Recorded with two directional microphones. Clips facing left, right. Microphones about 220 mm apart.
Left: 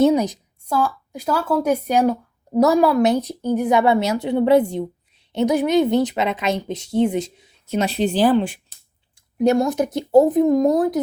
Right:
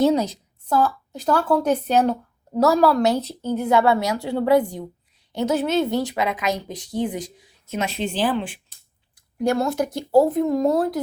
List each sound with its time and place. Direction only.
0.0 s a woman's voice: 15° left (ahead or behind); by 8.5 s 40° left (ahead or behind)
9.4 s speech: 20° left (ahead or behind)